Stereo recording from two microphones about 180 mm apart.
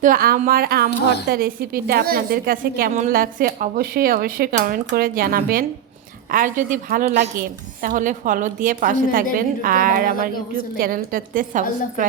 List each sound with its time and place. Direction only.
0.0 s a woman's voice: 55° right (ahead or behind)